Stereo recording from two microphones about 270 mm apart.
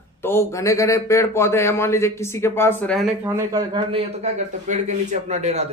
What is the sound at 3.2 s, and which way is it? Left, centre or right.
A man's voice, centre.